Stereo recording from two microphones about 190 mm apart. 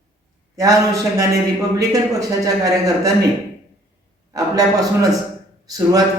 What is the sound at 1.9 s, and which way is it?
Speech, 15° right (ahead or behind).